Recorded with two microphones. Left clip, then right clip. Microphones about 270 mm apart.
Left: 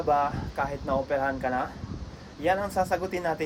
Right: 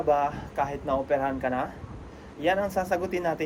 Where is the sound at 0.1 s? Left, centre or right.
Centre.